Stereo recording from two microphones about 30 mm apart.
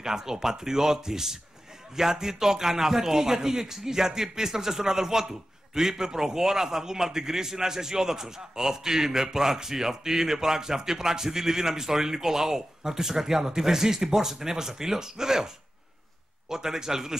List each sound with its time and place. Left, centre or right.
0.0 s a man's voice: centre